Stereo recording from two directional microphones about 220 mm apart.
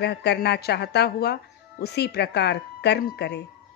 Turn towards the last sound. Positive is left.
turn(degrees=50)  # may be behind; listen again after turning